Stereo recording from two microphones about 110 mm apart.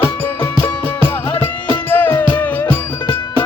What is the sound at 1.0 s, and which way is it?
Music, 20° left (ahead or behind).